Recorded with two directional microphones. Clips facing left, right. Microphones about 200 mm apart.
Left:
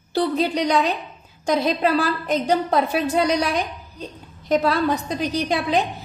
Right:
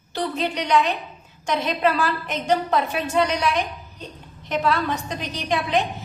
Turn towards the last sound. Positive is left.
turn(degrees=35)  # may be behind; listen again after turning